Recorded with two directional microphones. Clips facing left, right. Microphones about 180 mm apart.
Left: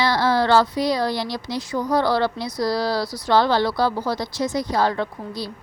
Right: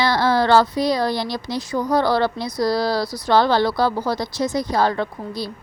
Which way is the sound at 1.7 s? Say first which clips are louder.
Right 1 dB; 45° right (ahead or behind).